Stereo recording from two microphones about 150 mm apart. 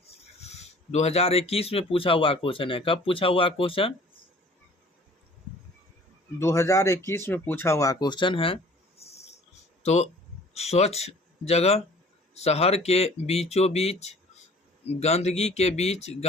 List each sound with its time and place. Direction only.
0.4 s speech: 45° left (ahead or behind)
6.4 s speech: 20° left (ahead or behind); by 8.5 s 35° left (ahead or behind)
9.0 s a sound: 45° left (ahead or behind)
9.8 s speech: 45° left (ahead or behind)